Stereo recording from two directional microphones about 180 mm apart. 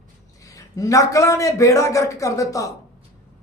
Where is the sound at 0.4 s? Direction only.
20° left (ahead or behind).